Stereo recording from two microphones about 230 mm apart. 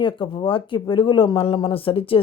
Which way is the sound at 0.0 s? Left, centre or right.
Left.